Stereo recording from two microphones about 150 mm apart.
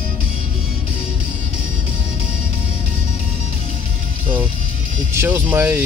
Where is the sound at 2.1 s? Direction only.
45° left (ahead or behind).